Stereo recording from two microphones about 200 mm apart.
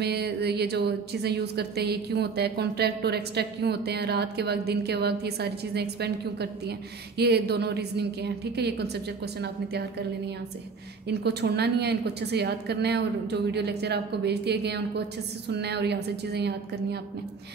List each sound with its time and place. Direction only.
0.0 s a woman's voice: 55° right (ahead or behind)